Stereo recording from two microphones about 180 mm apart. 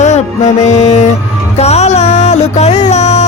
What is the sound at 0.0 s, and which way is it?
Music, 40° left (ahead or behind).